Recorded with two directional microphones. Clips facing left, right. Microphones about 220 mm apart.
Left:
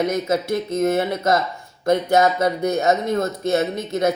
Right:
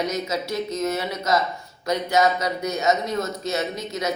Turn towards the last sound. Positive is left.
turn(degrees=55)  # may be behind; listen again after turning